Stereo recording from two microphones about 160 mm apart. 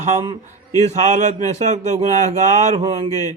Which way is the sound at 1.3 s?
45° right (ahead or behind).